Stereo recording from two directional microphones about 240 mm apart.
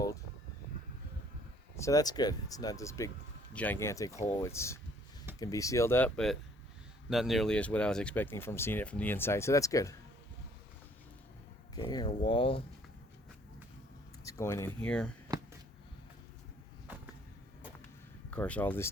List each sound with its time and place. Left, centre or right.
1.7 s speech: centre
11.7 s speech: centre
14.3 s speech: centre
18.3 s speech: centre